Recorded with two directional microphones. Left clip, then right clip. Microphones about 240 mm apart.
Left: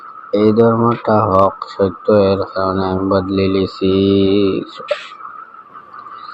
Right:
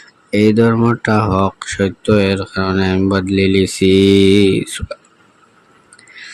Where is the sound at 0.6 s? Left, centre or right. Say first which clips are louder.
Left 2 dB; right.